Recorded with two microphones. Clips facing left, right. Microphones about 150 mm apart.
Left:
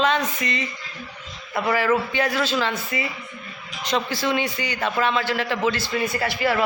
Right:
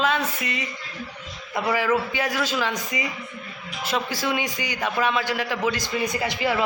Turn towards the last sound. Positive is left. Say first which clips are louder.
# left 2 dB
turn(degrees=-15)  # may be behind; listen again after turning